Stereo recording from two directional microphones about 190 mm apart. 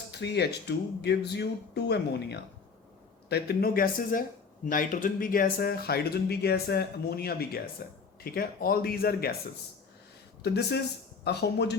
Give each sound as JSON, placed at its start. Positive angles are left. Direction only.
{"t": 0.1, "sound": "speech", "side_deg": 60}
{"t": 10.4, "sound": "speech", "side_deg": 60}